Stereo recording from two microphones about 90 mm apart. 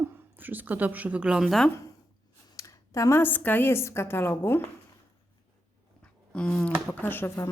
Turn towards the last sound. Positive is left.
turn(degrees=25)  # may be behind; listen again after turning